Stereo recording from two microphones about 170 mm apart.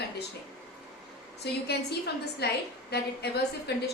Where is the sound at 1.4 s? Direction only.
80° left.